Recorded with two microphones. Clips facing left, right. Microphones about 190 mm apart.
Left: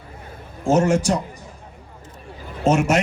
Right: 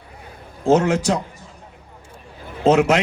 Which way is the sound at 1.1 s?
90° right.